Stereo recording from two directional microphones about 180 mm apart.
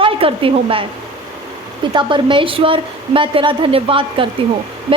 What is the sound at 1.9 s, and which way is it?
A woman's voice, 25° right (ahead or behind).